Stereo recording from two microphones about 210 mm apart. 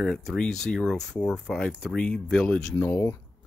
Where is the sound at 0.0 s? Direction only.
Centre (ahead or behind).